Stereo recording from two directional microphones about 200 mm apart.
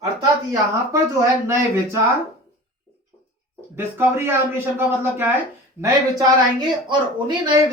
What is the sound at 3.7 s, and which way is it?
Speech, 10° right (ahead or behind).